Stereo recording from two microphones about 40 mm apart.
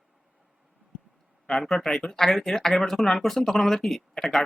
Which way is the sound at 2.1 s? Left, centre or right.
Centre.